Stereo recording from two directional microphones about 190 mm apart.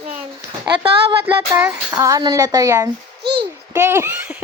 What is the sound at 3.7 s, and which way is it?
Speech, 10° right (ahead or behind).